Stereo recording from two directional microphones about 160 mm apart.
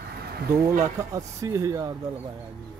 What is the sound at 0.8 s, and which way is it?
Speech, 20° right (ahead or behind).